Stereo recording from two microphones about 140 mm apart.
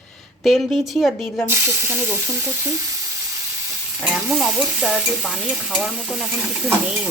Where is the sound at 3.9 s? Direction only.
5° right (ahead or behind).